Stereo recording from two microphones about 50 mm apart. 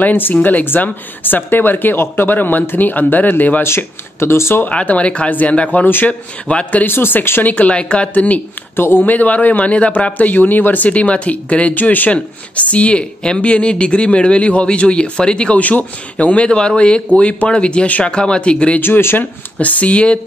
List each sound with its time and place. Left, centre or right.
0.0 s speech: left
3.6 s speech: left
4.6 s speech: left
6.8 s speech: left
7.4 s speech: left
7.7 s speech: left
8.7 s speech: left
10.9 s speech: left
11.7 s speech: left; by 15.5 s centre
15.5 s speech: left
18.8 s speech: left
19.6 s speech: left